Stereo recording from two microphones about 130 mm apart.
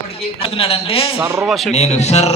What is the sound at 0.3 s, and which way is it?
Speech, 45° left (ahead or behind).